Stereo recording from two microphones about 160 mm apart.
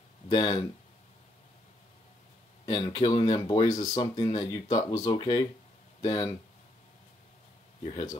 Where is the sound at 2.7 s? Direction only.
25° left (ahead or behind).